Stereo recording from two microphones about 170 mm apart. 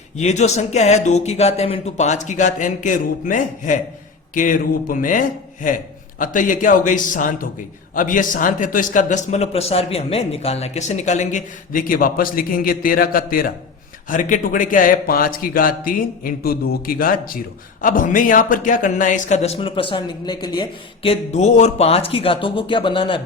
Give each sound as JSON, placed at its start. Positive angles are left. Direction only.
{"t": 0.2, "sound": "a man's voice", "side_deg": 40}